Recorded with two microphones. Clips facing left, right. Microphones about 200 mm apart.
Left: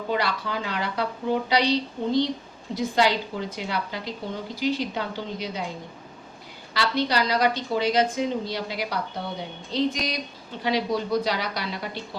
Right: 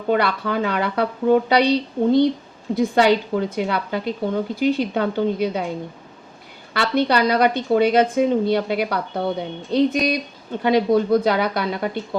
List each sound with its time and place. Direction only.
0.1 s a woman's voice: 55° right (ahead or behind)
6.7 s a woman's voice: 55° right (ahead or behind)